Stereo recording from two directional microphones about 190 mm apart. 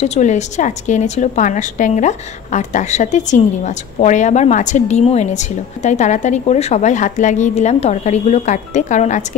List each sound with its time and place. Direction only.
0.0 s a woman's voice: 35° left (ahead or behind)